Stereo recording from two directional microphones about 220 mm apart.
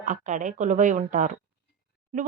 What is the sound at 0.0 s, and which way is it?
Speech, 35° right (ahead or behind).